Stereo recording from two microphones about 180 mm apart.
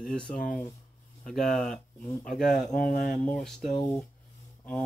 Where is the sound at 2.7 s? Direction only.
50° left (ahead or behind).